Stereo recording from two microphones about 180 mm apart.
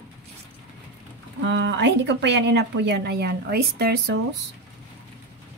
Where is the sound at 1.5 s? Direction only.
80° right; by 4.2 s 60° right (ahead or behind).